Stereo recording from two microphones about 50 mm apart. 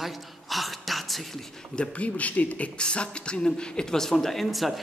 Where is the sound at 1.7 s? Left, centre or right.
Left; by 4.8 s centre.